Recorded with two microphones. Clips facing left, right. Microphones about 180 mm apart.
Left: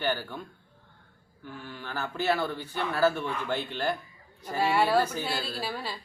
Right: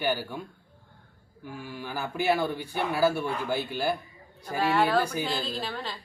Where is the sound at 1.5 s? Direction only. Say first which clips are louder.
Right 3 dB; 10° right (ahead or behind).